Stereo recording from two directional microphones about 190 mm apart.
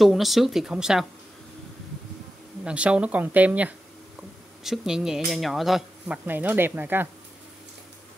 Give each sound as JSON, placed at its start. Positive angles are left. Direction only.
{"t": 0.0, "sound": "speech", "side_deg": 0}
{"t": 2.6, "sound": "speech", "side_deg": -5}